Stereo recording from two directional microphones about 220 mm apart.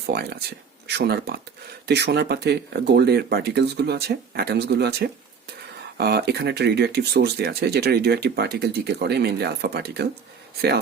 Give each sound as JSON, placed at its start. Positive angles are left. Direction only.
{"t": 0.0, "sound": "speech", "side_deg": -45}